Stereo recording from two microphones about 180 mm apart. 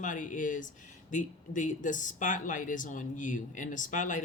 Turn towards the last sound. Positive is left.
turn(degrees=45)  # may be behind; listen again after turning